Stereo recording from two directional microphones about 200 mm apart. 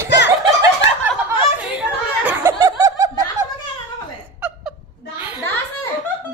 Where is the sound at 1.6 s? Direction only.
5° right (ahead or behind).